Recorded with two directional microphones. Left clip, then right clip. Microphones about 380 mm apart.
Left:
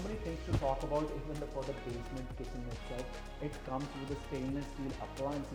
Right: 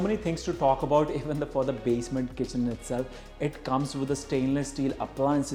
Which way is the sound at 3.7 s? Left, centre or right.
Right.